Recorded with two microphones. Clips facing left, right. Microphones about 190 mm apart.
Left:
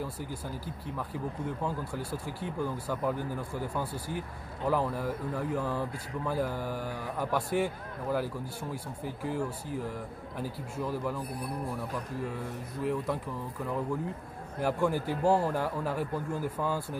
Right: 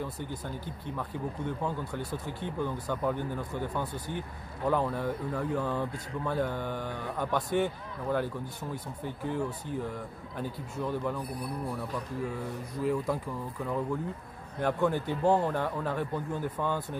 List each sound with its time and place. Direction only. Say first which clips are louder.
0.0 s speech: right 1 dB; 5° left (ahead or behind)
12.3 s speech: right 1 dB; centre (ahead or behind)